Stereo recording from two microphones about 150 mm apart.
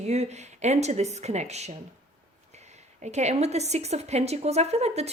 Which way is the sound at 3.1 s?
45° right (ahead or behind).